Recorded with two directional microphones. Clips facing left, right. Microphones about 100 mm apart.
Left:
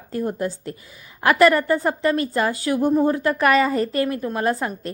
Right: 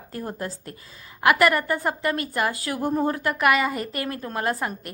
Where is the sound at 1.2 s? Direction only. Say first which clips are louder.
Left 4 dB; 30° left (ahead or behind).